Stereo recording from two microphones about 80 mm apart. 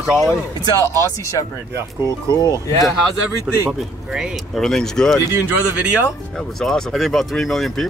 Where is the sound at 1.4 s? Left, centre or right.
Left.